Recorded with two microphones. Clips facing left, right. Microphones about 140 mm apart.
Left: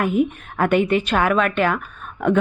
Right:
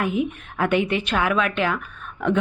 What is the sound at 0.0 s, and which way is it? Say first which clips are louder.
A woman's voice: left 4 dB; 50° left (ahead or behind).